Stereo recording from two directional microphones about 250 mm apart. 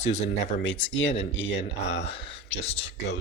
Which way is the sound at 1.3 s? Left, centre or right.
Left.